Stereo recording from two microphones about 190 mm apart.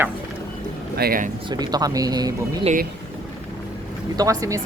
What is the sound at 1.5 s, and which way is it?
Speech, 20° right (ahead or behind).